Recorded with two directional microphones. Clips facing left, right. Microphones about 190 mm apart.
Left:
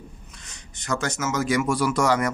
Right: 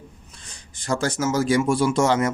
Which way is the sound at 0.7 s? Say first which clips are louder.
Right 4 dB; 30° right (ahead or behind).